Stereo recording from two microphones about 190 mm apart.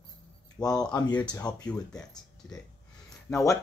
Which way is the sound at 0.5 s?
20° left (ahead or behind).